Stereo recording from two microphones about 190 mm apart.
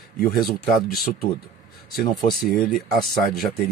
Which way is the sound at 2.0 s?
Centre (ahead or behind).